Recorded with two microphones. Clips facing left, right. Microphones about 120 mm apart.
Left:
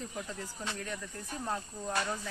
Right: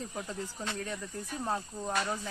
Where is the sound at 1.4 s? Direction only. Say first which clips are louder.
Right 2 dB; 15° right (ahead or behind).